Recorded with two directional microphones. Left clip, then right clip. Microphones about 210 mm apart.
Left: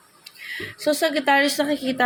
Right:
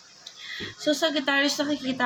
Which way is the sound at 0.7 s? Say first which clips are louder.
Left 3 dB; 30° left (ahead or behind).